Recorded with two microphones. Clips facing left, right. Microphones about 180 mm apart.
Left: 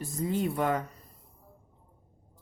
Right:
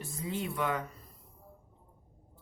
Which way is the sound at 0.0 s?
45° left (ahead or behind).